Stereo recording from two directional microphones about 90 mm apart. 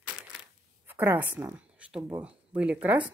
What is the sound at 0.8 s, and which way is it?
Speech, 20° right (ahead or behind).